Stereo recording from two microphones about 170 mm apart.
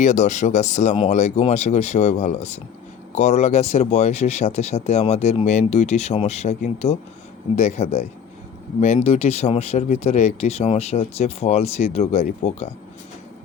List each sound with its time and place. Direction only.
0.0 s speech: 45° left (ahead or behind)